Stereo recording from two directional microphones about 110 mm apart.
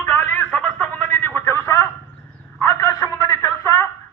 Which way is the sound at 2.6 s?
35° left (ahead or behind).